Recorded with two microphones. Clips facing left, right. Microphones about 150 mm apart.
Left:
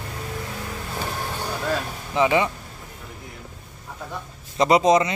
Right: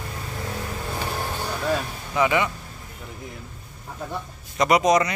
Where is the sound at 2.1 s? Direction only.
25° left (ahead or behind).